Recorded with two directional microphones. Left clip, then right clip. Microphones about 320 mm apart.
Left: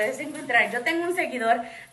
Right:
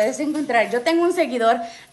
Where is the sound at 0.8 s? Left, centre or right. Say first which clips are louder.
Right 7 dB; centre.